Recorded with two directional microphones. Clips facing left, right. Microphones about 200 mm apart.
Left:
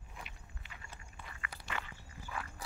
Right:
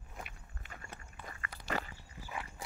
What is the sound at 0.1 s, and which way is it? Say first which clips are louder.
Biting: right 3 dB; 45° right (ahead or behind).